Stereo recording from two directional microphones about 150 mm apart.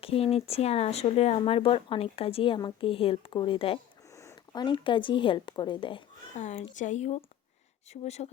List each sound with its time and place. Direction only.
0.0 s speech: 40° left (ahead or behind)
4.1 s speech: 20° left (ahead or behind)
6.3 s speech: 50° left (ahead or behind)